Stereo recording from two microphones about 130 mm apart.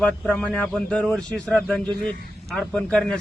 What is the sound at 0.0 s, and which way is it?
Speech, 10° left (ahead or behind).